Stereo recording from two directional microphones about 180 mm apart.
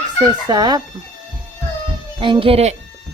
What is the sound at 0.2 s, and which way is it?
Speech, 25° right (ahead or behind).